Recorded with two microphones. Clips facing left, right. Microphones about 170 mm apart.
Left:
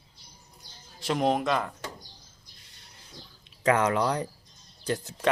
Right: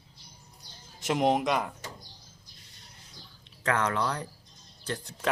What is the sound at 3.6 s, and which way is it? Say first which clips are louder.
Speech: left 5 dB; 10° left (ahead or behind).